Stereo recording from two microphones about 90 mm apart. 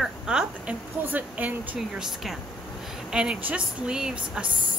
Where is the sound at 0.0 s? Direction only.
5° right (ahead or behind).